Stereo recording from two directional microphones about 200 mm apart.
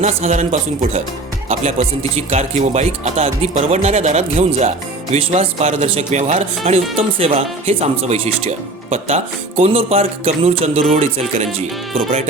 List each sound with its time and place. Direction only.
0.0 s speech: 35° right (ahead or behind)